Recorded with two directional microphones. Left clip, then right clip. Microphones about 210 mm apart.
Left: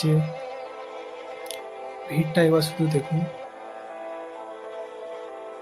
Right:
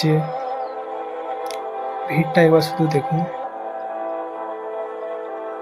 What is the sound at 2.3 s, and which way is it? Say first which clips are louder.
Speech: right 6 dB; 10° right (ahead or behind).